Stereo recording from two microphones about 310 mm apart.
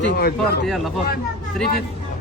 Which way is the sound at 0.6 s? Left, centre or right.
Centre.